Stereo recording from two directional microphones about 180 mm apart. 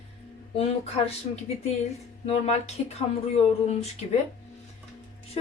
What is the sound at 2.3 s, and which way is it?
Speech, 35° left (ahead or behind).